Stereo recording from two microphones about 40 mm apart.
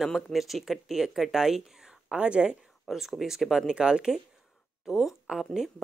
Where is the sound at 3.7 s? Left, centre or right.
Right.